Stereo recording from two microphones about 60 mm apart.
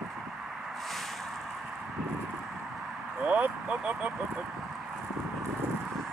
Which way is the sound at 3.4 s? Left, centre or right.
Right.